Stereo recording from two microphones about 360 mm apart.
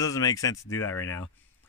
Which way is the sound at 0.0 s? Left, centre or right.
Centre.